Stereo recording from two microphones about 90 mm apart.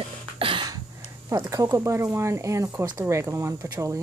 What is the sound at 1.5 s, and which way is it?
Speech, 35° right (ahead or behind).